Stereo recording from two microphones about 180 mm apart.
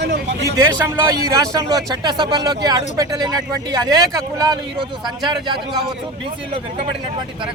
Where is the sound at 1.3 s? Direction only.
20° right (ahead or behind).